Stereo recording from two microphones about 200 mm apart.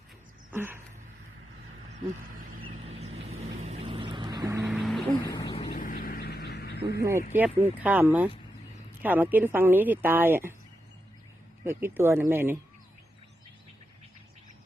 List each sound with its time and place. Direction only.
0.5 s a sound: 10° right (ahead or behind)
2.6 s vehicle: 30° right (ahead or behind)
4.6 s vehicle: centre (ahead or behind)
5.2 s a sound: 15° left (ahead or behind)
5.5 s vehicle: 40° left (ahead or behind)
7.0 s a woman's voice: 15° right (ahead or behind)
11.6 s a woman's voice: 10° right (ahead or behind)